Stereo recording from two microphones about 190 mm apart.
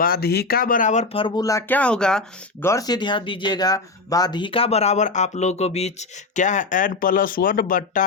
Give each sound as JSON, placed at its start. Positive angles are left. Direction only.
{"t": 0.0, "sound": "speech", "side_deg": 55}
{"t": 2.6, "sound": "speech", "side_deg": 20}